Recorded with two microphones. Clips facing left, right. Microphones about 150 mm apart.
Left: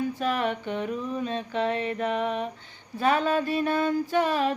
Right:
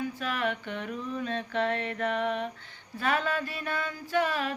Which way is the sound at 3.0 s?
25° left (ahead or behind).